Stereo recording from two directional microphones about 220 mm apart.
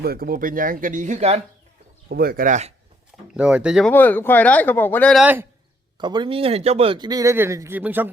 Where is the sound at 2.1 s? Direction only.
45° right (ahead or behind).